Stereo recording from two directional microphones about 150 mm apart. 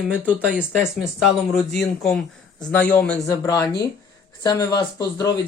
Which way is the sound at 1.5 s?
5° left (ahead or behind).